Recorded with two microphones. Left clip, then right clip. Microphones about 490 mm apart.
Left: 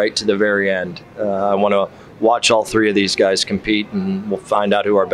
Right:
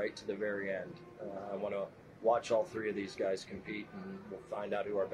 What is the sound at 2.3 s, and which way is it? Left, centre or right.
Speech, left.